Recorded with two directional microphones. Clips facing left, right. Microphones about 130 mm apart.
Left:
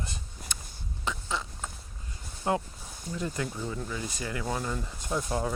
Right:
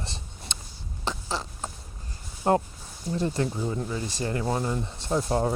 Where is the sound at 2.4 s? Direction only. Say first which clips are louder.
Right 6 dB; 45° right (ahead or behind).